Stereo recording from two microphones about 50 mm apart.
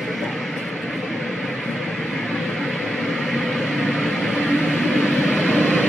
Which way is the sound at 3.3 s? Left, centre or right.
Centre.